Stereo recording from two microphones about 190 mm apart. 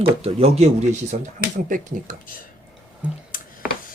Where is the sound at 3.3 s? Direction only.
45° left (ahead or behind).